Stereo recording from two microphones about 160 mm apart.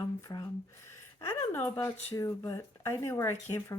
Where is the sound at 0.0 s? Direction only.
25° left (ahead or behind).